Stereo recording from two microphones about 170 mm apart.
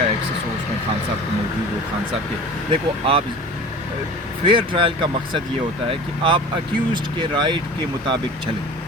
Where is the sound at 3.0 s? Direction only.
35° right (ahead or behind).